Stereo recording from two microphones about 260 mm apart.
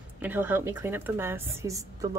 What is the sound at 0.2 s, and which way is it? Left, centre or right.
A woman's voice, centre.